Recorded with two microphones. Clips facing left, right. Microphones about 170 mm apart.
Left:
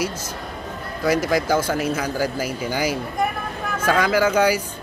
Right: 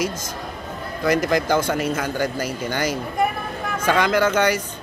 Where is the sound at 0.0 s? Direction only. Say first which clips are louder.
Right 1 dB; 10° left (ahead or behind).